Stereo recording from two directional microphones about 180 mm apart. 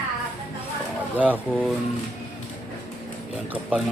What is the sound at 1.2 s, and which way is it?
Speech, 10° right (ahead or behind).